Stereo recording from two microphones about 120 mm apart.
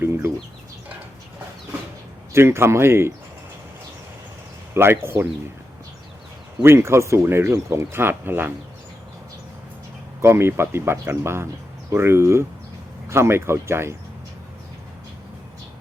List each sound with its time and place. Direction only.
0.0 s a sound: 20° right (ahead or behind)
2.3 s speech: 20° right (ahead or behind)
4.7 s speech: 20° right (ahead or behind)
6.6 s speech: 20° right (ahead or behind)
10.2 s speech: 20° right (ahead or behind)